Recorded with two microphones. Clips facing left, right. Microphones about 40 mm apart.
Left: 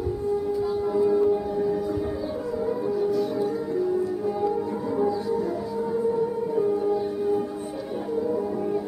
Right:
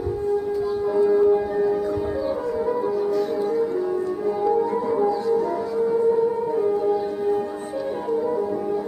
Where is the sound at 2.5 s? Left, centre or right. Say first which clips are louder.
Even; right.